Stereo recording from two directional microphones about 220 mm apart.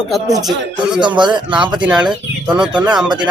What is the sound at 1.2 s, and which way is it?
Speech, 20° right (ahead or behind).